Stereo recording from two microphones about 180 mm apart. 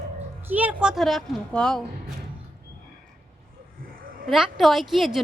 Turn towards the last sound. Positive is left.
turn(degrees=0)  # may be behind; listen again after turning